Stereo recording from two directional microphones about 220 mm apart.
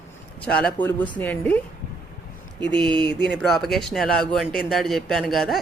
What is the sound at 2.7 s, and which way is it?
Speech, 20° right (ahead or behind).